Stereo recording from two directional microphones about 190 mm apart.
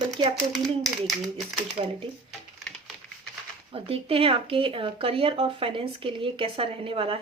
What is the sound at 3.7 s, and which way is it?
Speech, 30° right (ahead or behind).